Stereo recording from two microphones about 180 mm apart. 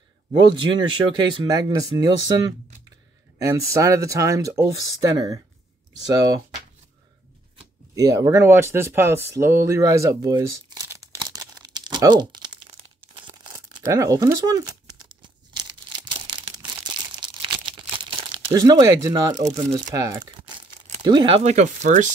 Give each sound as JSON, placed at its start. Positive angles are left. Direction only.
{"t": 0.5, "sound": "speech", "side_deg": -25}
{"t": 7.9, "sound": "speech", "side_deg": -20}
{"t": 9.7, "sound": "crumpling", "side_deg": -15}
{"t": 19.9, "sound": "speech", "side_deg": -20}
{"t": 21.5, "sound": "speech", "side_deg": -40}